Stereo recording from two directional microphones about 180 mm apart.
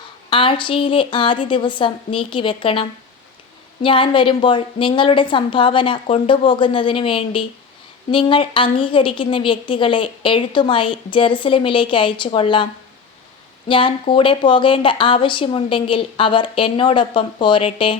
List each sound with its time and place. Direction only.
0.3 s a woman's voice: 30° left (ahead or behind)
3.8 s a woman's voice: 30° left (ahead or behind)
13.7 s a woman's voice: 30° left (ahead or behind)